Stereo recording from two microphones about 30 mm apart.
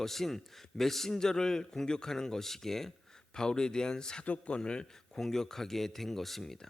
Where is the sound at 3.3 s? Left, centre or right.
Left.